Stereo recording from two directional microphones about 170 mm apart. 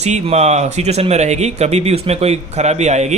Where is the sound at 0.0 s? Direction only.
40° right (ahead or behind).